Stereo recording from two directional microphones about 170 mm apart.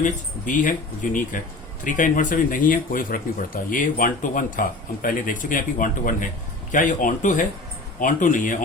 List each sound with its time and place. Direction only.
0.0 s speech: 50° left (ahead or behind)